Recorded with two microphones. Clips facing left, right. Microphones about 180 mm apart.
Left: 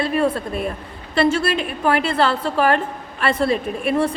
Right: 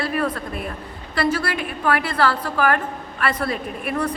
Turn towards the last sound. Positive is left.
turn(degrees=25)  # may be behind; listen again after turning